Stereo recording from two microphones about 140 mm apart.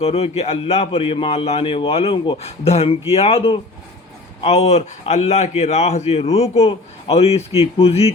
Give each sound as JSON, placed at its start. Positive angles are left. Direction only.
{"t": 0.0, "sound": "a man's voice", "side_deg": 45}